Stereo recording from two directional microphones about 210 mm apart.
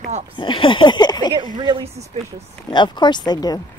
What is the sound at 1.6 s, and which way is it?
Speech, 20° right (ahead or behind).